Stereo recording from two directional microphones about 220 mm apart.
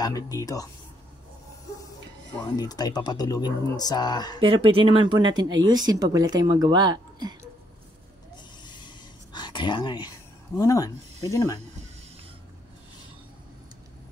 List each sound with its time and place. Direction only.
0.0 s speech: 15° left (ahead or behind)
2.3 s speech: 15° left (ahead or behind)
4.4 s speech: 25° right (ahead or behind)
8.6 s a sound: 20° left (ahead or behind)
10.6 s speech: 15° left (ahead or behind)